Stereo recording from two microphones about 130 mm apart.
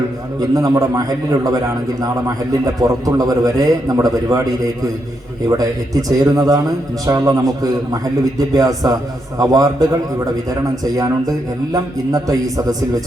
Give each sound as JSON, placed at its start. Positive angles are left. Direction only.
{"t": 0.3, "sound": "a man's voice", "side_deg": -30}
{"t": 2.8, "sound": "a man's voice", "side_deg": -25}
{"t": 5.5, "sound": "a man's voice", "side_deg": -30}